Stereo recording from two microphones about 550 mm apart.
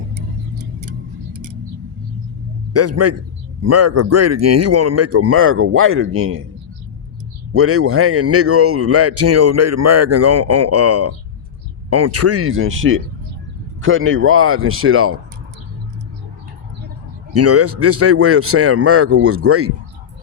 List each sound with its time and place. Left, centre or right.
1.3 s a sound: right
2.7 s a man's voice: right
7.5 s a man's voice: right
17.3 s a man's voice: right